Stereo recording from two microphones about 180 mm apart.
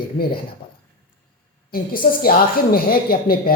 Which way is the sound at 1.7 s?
55° left (ahead or behind).